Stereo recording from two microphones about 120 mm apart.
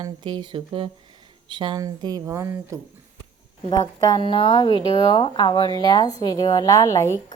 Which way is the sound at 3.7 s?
35° left (ahead or behind).